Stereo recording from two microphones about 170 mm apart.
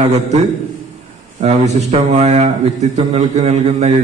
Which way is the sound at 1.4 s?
40° right (ahead or behind).